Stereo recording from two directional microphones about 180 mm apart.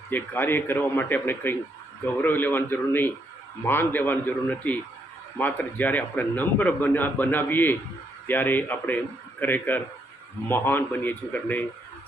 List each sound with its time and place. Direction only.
0.1 s a man's voice: 10° left (ahead or behind)